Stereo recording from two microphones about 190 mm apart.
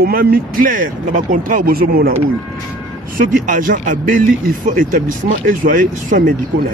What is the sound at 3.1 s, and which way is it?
Speech, 45° right (ahead or behind).